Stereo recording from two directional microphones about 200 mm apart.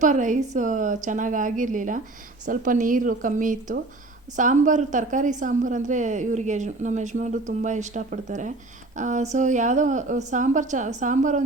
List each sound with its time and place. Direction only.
0.0 s a woman's voice: 40° right (ahead or behind)